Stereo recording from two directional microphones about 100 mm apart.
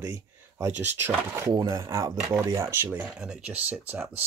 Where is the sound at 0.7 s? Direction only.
20° right (ahead or behind).